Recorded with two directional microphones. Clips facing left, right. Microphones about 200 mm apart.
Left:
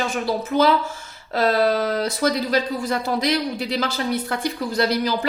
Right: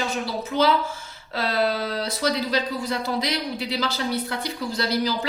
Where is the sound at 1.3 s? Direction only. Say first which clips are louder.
Left 5 dB; 50° left (ahead or behind).